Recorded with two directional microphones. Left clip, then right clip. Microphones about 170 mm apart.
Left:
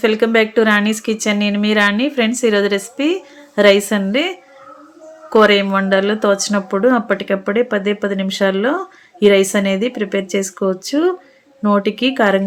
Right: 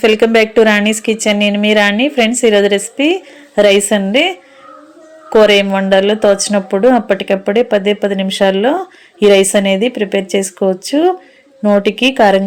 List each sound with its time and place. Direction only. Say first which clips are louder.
0.0 s speech: right 4 dB; 20° right (ahead or behind)